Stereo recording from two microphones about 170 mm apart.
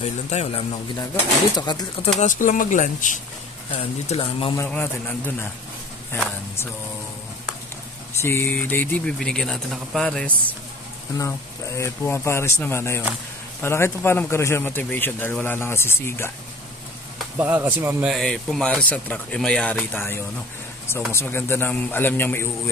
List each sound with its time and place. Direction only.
0.0 s a man's voice: 40° left (ahead or behind)
2.1 s speech: 50° left (ahead or behind)
4.1 s a man's voice: 30° left (ahead or behind)
4.6 s a man's voice: 10° left (ahead or behind)
8.1 s a man's voice: 15° left (ahead or behind)
11.1 s a man's voice: 15° left (ahead or behind)
17.4 s a man's voice: 10° right (ahead or behind); by 22.5 s 15° left (ahead or behind)